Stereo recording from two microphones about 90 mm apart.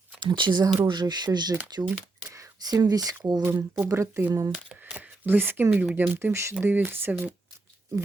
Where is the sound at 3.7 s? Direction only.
30° right (ahead or behind).